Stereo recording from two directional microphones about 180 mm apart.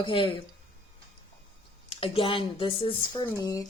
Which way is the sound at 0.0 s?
30° left (ahead or behind).